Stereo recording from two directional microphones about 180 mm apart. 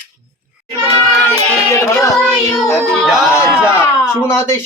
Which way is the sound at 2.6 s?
10° left (ahead or behind).